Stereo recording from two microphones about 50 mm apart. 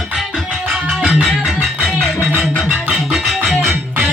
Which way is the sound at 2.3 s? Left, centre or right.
Right.